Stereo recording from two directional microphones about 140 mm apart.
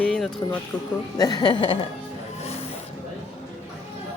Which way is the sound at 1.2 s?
25° left (ahead or behind).